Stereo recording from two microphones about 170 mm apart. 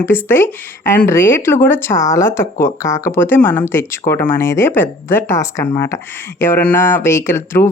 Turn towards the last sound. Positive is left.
turn(degrees=15)  # may be behind; listen again after turning